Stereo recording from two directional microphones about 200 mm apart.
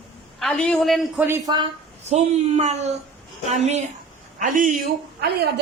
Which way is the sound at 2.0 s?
35° right (ahead or behind).